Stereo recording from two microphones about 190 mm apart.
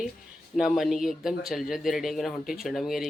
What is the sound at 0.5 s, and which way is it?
Speech, centre (ahead or behind).